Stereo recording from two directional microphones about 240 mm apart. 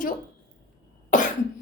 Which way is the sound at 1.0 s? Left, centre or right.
Left.